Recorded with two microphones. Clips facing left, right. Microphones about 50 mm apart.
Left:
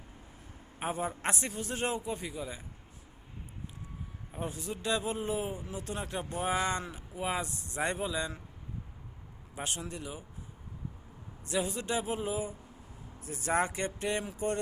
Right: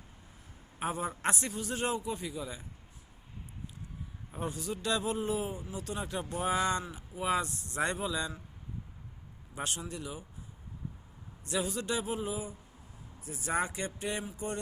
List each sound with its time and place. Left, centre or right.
0.8 s a man's voice: left
4.3 s a man's voice: centre
4.6 s a man's voice: left
9.9 s a man's voice: left
11.4 s a man's voice: left
13.2 s speech: left